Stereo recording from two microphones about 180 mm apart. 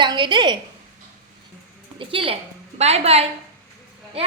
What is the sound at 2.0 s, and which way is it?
A woman's voice, 30° right (ahead or behind).